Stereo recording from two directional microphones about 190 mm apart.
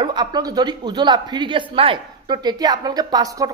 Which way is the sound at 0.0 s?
25° right (ahead or behind).